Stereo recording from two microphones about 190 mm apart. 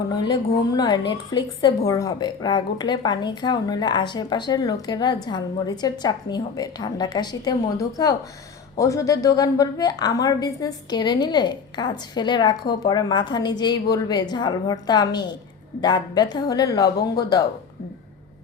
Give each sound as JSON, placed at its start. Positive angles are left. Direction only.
{"t": 0.1, "sound": "a woman's voice", "side_deg": 20}